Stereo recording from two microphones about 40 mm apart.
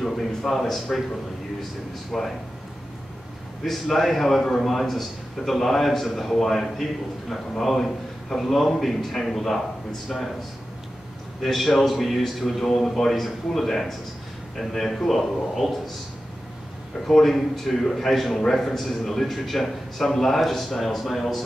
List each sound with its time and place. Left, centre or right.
0.0 s a man's voice: centre
2.1 s a man's voice: centre
3.6 s a man's voice: centre
11.4 s a man's voice: centre
17.1 s a man's voice: centre